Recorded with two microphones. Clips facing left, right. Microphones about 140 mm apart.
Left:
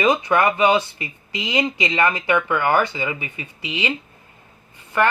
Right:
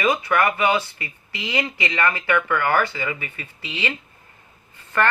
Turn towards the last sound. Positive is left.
turn(degrees=15)  # may be behind; listen again after turning